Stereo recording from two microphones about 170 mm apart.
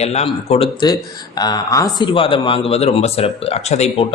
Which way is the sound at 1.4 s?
25° left (ahead or behind).